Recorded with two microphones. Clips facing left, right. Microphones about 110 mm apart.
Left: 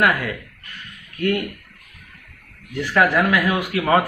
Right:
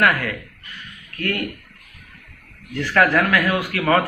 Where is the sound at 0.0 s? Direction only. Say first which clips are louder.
Even; 15° left (ahead or behind).